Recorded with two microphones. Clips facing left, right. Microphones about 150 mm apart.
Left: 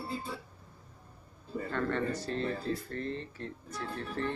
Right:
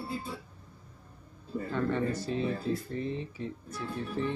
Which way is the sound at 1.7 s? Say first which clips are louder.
Right 2 dB; 10° right (ahead or behind).